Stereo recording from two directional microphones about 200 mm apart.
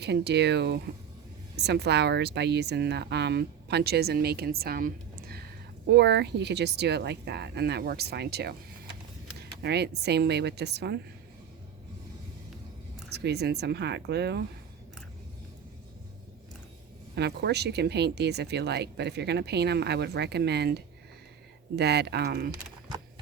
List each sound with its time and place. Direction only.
0.0 s speech: 55° right (ahead or behind)
9.6 s speech: 55° right (ahead or behind)
13.1 s speech: 55° right (ahead or behind)
17.2 s speech: 55° right (ahead or behind)